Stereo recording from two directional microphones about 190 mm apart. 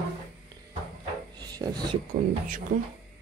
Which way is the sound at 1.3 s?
20° right (ahead or behind).